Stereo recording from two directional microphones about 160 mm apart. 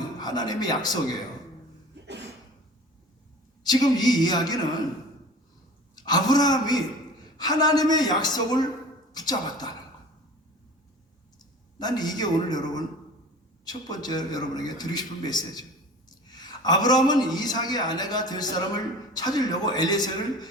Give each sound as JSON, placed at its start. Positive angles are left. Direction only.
{"t": 0.2, "sound": "a man's voice", "side_deg": 25}
{"t": 3.6, "sound": "a man's voice", "side_deg": 25}
{"t": 6.0, "sound": "a man's voice", "side_deg": 25}
{"t": 11.3, "sound": "a woman's voice", "side_deg": 25}